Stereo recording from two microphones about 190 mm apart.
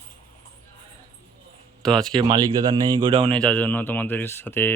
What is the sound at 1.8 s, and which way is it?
Speech, 5° left (ahead or behind).